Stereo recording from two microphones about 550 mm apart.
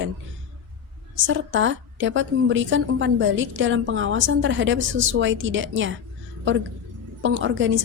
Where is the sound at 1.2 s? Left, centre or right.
Right.